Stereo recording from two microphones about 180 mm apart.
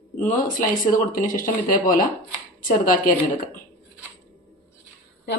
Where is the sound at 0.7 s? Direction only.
50° left (ahead or behind).